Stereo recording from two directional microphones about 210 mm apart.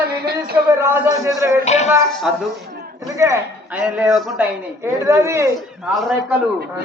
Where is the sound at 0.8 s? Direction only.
10° right (ahead or behind).